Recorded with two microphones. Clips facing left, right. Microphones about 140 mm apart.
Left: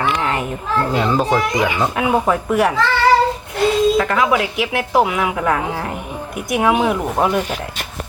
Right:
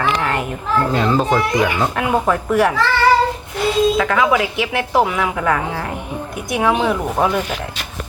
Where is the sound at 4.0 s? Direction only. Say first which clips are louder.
Right 1 dB; centre (ahead or behind).